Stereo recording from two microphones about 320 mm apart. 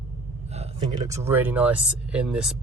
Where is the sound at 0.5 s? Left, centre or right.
Centre.